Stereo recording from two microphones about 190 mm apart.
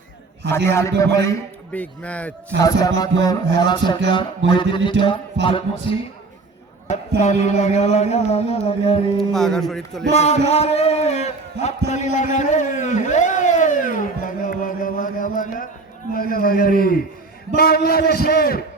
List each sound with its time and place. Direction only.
0.5 s a man's voice: 15° left (ahead or behind)
2.6 s music: 20° left (ahead or behind)
7.2 s a sound: 35° left (ahead or behind)
9.1 s speech: centre (ahead or behind)
10.1 s a sound: 35° left (ahead or behind)
16.1 s a man's voice: 50° left (ahead or behind)